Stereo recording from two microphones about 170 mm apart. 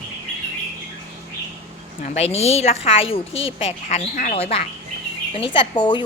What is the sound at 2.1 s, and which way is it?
A woman's voice, 40° left (ahead or behind).